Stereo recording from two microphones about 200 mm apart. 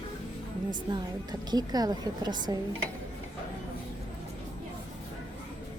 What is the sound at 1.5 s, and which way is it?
A woman's voice, 20° right (ahead or behind).